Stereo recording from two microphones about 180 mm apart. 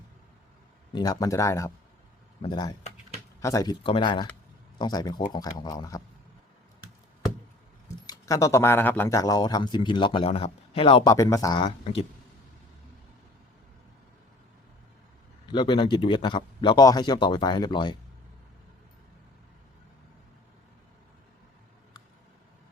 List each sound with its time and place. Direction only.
0.9 s speech: 20° left (ahead or behind)
8.0 s speech: 20° left (ahead or behind)
11.1 s speech: 20° left (ahead or behind)
15.4 s speech: 25° left (ahead or behind)